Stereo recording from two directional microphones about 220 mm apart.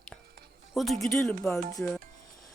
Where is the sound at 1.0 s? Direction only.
Centre (ahead or behind).